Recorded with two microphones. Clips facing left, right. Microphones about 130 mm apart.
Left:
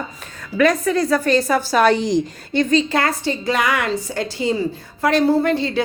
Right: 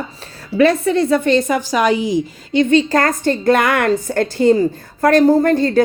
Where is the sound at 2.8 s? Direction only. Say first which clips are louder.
Right 4 dB; 45° right (ahead or behind).